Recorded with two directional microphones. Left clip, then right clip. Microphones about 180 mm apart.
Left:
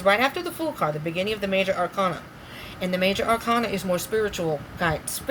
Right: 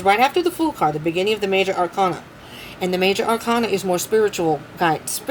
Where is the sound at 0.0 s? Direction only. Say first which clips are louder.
Right 5 dB; 50° right (ahead or behind).